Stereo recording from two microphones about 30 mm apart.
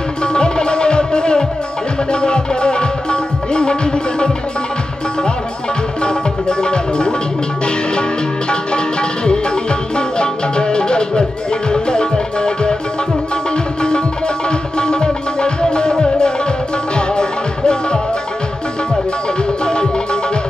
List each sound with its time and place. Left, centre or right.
0.2 s music: left
6.0 s music: left
8.5 s music: left
13.8 s music: left
19.6 s music: left